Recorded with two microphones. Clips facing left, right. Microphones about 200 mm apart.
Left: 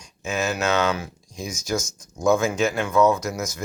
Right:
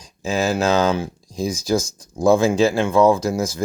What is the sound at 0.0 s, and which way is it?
Speech, 30° right (ahead or behind).